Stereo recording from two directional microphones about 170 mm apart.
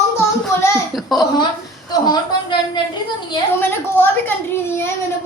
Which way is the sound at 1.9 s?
25° left (ahead or behind).